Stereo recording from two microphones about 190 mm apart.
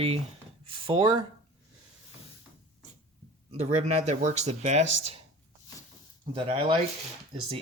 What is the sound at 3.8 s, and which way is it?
Speech, 35° right (ahead or behind).